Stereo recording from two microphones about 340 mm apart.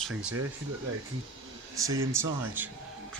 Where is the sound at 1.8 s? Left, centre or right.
Centre.